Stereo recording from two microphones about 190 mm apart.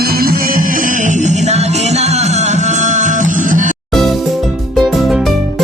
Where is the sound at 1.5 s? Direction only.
35° right (ahead or behind).